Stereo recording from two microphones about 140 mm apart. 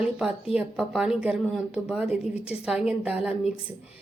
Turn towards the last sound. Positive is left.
turn(degrees=-10)  # may be behind; listen again after turning